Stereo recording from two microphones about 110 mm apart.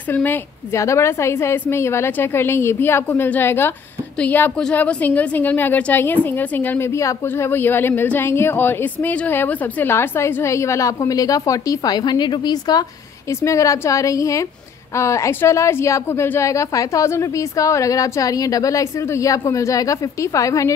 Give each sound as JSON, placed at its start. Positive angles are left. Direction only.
{"t": 0.1, "sound": "a woman's voice", "side_deg": 15}
{"t": 13.3, "sound": "a woman's voice", "side_deg": 25}